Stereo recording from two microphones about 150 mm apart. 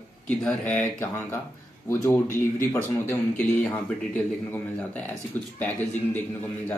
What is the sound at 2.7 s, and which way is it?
Speech, 15° left (ahead or behind).